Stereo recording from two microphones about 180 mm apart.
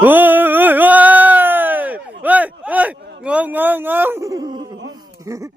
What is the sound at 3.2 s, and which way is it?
Speech, 10° right (ahead or behind).